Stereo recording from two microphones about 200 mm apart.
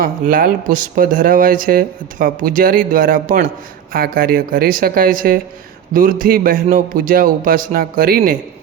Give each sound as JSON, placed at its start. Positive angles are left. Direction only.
{"t": 0.0, "sound": "speech", "side_deg": -45}